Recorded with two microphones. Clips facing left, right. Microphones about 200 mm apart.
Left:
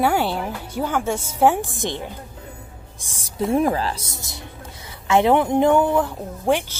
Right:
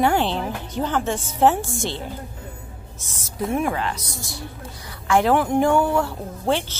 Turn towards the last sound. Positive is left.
turn(degrees=15)  # may be behind; listen again after turning